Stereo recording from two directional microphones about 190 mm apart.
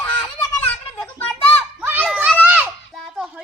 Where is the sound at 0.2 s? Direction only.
10° left (ahead or behind).